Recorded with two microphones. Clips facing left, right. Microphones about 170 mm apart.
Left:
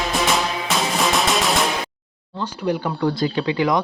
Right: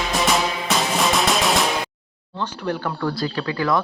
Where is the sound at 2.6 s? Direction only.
10° left (ahead or behind).